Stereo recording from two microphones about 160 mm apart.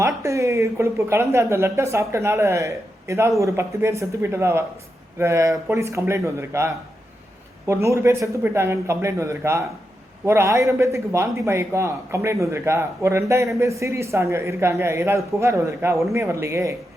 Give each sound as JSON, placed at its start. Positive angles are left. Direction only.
{"t": 0.2, "sound": "a man's voice", "side_deg": -20}